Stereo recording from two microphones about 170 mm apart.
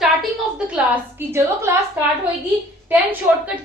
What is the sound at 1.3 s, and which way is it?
Speech, 15° right (ahead or behind).